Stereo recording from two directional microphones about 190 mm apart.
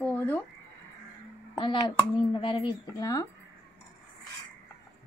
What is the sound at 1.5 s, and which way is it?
A child's voice, 25° left (ahead or behind).